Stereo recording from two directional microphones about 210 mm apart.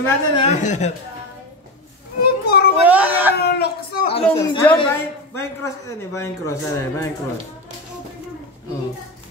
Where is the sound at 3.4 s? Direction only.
50° left (ahead or behind).